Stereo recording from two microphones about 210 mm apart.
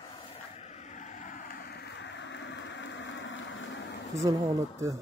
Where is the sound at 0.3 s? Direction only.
30° left (ahead or behind); by 3.8 s 65° left (ahead or behind).